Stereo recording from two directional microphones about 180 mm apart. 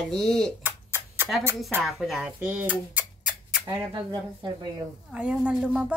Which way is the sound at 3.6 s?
20° right (ahead or behind).